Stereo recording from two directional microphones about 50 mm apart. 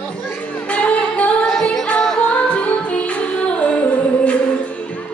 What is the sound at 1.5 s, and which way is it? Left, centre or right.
Music, centre.